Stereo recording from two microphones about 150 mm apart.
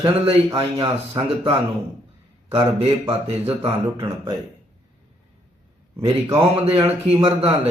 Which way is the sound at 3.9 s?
30° right (ahead or behind).